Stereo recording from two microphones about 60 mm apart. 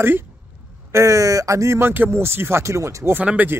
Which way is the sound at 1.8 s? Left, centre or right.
Right.